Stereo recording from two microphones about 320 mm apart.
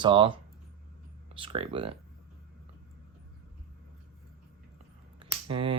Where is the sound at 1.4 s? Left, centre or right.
Centre.